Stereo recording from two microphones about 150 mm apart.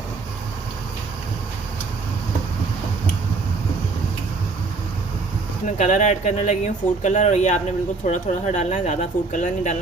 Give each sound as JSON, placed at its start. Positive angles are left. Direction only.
{"t": 5.6, "sound": "speech", "side_deg": 55}